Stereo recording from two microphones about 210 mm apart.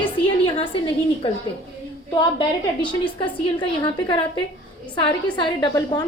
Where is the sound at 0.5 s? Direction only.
25° left (ahead or behind).